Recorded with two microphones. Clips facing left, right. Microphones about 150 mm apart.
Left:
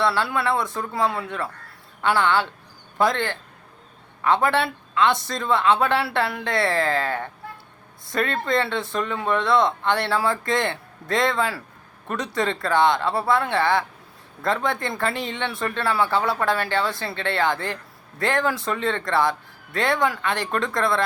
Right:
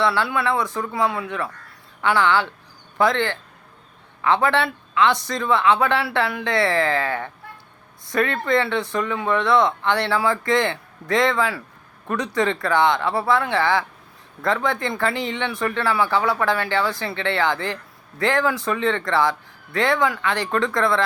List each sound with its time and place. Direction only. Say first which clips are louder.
0.0 s speech: right 1 dB; 25° left (ahead or behind)